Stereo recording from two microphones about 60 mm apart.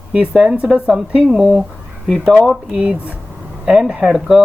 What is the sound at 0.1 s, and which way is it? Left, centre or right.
Speech, centre.